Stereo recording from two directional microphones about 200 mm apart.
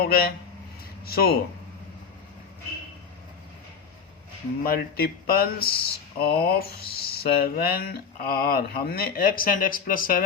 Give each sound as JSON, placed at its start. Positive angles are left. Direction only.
{"t": 0.0, "sound": "speech", "side_deg": 50}
{"t": 4.6, "sound": "speech", "side_deg": 50}